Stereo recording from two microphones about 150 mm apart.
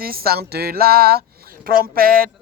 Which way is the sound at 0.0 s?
85° right.